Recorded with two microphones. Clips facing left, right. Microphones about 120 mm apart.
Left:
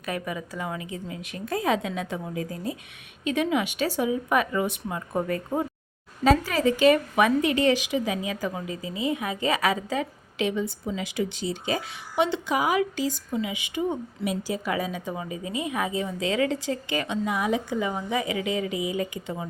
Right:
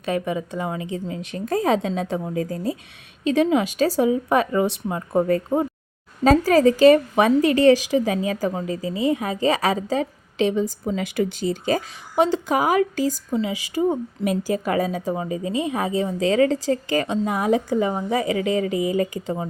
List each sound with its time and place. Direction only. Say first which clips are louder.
0.0 s speech: right 7 dB; 25° right (ahead or behind)
6.2 s speech: right 6 dB; 40° right (ahead or behind)
10.9 s speech: right 5 dB; 50° right (ahead or behind)